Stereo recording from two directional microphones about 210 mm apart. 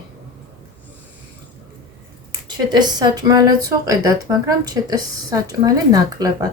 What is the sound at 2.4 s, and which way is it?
Speech, 20° right (ahead or behind).